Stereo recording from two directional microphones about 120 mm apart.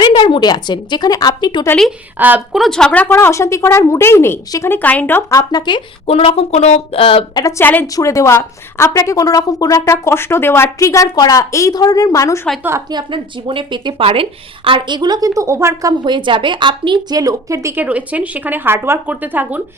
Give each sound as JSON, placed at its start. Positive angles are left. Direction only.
{"t": 0.0, "sound": "a woman's voice", "side_deg": 40}
{"t": 2.1, "sound": "speech", "side_deg": -15}
{"t": 2.5, "sound": "speech", "side_deg": 0}
{"t": 3.1, "sound": "a woman's voice", "side_deg": 25}
{"t": 5.4, "sound": "speech", "side_deg": 35}
{"t": 6.1, "sound": "speech", "side_deg": 55}
{"t": 7.0, "sound": "a woman's voice", "side_deg": 50}
{"t": 7.6, "sound": "speech", "side_deg": 15}
{"t": 7.9, "sound": "a woman's voice", "side_deg": 25}
{"t": 12.9, "sound": "a woman's voice", "side_deg": -40}
{"t": 17.8, "sound": "speech", "side_deg": -10}